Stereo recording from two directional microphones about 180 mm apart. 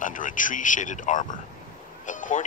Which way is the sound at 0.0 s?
45° left (ahead or behind).